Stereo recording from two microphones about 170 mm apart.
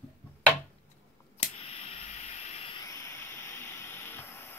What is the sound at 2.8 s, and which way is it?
Steam, 20° left (ahead or behind).